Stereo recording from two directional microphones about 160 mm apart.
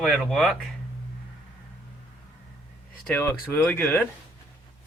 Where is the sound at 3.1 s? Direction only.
15° left (ahead or behind).